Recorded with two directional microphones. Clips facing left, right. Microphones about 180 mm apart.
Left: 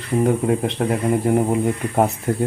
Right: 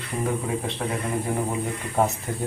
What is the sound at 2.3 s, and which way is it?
Speech, 60° left (ahead or behind).